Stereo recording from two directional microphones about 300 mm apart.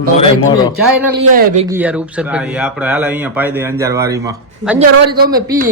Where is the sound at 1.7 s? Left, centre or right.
Centre.